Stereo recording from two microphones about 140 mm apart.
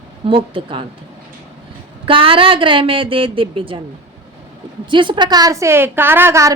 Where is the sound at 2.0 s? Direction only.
40° right (ahead or behind).